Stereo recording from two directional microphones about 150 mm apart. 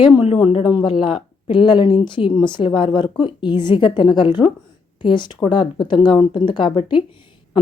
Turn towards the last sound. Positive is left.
turn(degrees=35)  # may be behind; listen again after turning